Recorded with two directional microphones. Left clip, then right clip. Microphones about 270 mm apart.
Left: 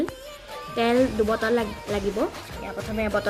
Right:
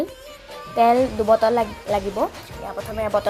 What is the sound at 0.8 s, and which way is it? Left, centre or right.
Speech, centre.